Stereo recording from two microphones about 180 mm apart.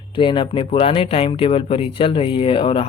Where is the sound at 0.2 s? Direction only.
30° left (ahead or behind).